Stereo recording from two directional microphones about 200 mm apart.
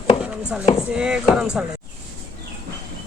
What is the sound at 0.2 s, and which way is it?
Chopping, 5° right (ahead or behind).